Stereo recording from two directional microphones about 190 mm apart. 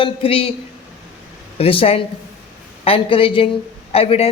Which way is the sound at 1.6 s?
30° left (ahead or behind).